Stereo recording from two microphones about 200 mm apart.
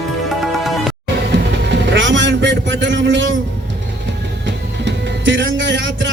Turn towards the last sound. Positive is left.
turn(degrees=-65)  # may be behind; listen again after turning